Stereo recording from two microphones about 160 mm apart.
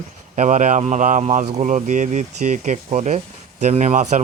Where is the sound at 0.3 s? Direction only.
50° right (ahead or behind).